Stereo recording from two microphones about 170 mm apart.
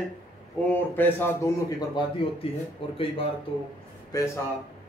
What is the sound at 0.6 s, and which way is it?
A man's voice, 10° left (ahead or behind).